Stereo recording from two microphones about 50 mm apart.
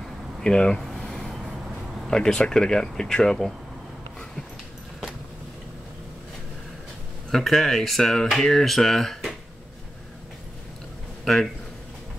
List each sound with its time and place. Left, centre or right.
0.4 s a sound: centre
2.0 s speech: centre
7.2 s speech: centre